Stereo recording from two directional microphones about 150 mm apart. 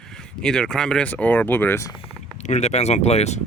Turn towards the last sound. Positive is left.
turn(degrees=45)  # may be behind; listen again after turning